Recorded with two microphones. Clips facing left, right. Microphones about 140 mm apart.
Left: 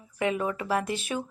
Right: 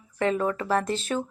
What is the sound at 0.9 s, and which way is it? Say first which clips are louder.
Speech: right 3 dB; 10° left (ahead or behind).